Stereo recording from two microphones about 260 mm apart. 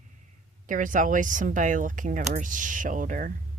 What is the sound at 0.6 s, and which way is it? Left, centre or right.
Speech, right.